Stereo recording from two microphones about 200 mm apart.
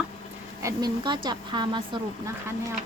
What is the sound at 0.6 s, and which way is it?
Speech, 20° right (ahead or behind).